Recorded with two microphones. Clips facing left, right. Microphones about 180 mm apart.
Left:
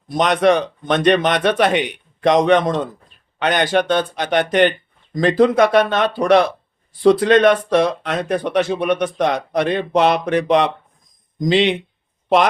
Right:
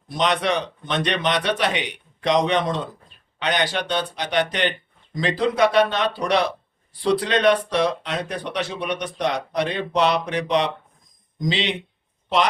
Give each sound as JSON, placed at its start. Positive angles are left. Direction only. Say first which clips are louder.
{"t": 0.1, "sound": "speech", "louder": "left 7 dB", "side_deg": 50}